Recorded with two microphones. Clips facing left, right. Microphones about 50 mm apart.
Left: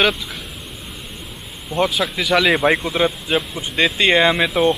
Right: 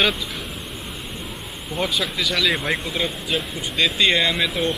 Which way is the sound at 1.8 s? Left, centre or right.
Centre.